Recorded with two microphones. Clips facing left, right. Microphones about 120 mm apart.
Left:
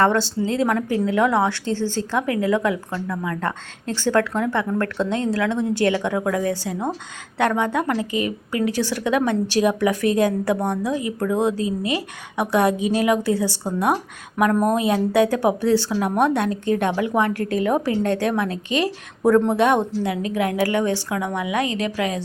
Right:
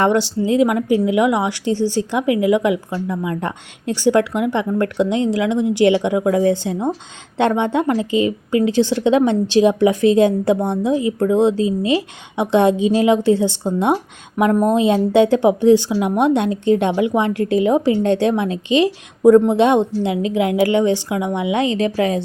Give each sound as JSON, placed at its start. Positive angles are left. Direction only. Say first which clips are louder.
{"t": 0.0, "sound": "a woman's voice", "louder": "right 3 dB", "side_deg": -15}